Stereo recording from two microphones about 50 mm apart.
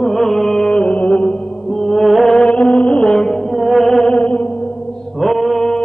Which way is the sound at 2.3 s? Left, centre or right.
Left.